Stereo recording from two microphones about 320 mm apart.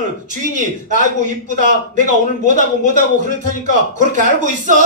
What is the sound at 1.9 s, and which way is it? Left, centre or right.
A man's voice, right.